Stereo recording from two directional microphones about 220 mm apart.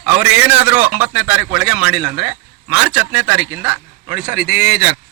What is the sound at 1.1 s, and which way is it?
A man's voice, 5° right (ahead or behind).